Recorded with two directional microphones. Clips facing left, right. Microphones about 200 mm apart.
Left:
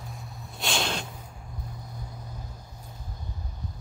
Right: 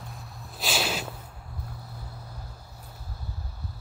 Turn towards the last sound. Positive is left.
turn(degrees=-10)  # may be behind; listen again after turning